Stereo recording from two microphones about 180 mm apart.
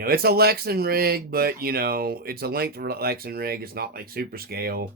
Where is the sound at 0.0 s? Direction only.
60° right (ahead or behind).